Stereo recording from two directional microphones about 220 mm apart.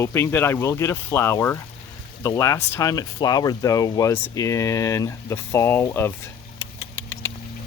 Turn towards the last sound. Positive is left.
turn(degrees=65)  # may be behind; listen again after turning